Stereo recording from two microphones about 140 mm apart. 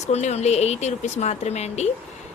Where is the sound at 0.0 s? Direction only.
55° left (ahead or behind).